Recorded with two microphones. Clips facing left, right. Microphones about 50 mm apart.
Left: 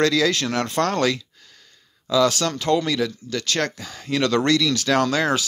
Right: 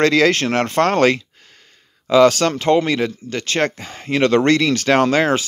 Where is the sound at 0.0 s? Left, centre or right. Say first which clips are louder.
Right 5 dB; right.